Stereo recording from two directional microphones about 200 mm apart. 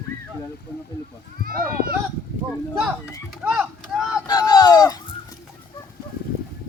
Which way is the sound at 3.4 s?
5° right (ahead or behind).